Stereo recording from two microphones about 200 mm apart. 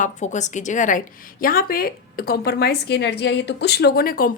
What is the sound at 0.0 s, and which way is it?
A woman's voice, 35° left (ahead or behind).